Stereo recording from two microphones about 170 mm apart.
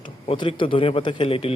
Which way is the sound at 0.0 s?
30° left (ahead or behind).